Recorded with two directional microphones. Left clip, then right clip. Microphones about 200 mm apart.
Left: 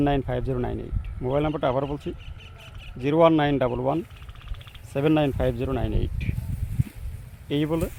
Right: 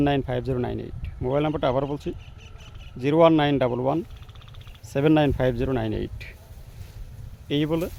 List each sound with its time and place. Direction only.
0.0 s speech: 5° right (ahead or behind)
4.9 s speech: 20° right (ahead or behind)
7.4 s speech: 5° right (ahead or behind)